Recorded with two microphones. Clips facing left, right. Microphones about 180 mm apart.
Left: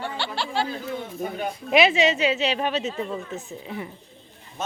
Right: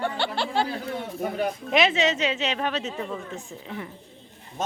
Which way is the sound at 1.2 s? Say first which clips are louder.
Right 4 dB; 70° right (ahead or behind).